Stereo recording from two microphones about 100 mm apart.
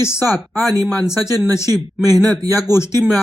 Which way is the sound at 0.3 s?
Centre (ahead or behind).